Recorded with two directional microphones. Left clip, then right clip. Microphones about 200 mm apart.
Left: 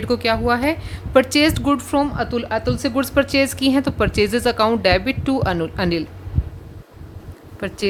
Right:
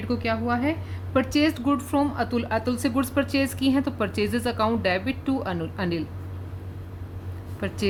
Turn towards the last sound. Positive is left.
turn(degrees=25)  # may be behind; listen again after turning